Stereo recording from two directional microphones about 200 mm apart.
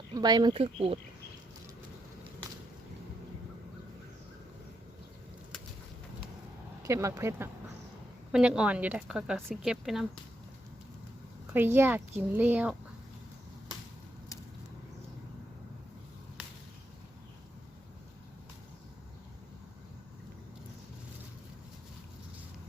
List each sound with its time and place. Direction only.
0.1 s speech: 20° right (ahead or behind)
6.8 s a woman's voice: 15° right (ahead or behind)
11.5 s speech: 10° right (ahead or behind)